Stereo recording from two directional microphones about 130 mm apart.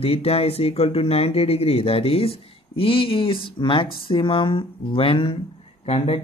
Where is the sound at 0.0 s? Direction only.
50° left (ahead or behind).